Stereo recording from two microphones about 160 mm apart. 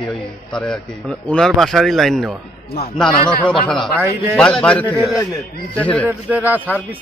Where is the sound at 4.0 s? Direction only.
15° right (ahead or behind).